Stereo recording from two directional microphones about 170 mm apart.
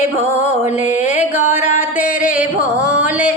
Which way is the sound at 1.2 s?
10° right (ahead or behind).